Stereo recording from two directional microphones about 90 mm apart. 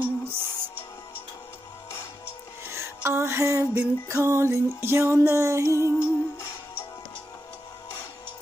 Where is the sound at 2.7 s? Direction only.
30° right (ahead or behind).